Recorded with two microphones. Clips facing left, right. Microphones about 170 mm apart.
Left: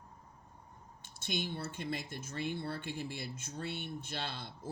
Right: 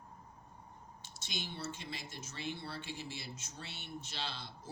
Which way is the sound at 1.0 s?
55° left (ahead or behind).